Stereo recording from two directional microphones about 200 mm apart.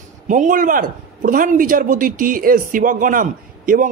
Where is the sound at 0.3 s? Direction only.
40° right (ahead or behind).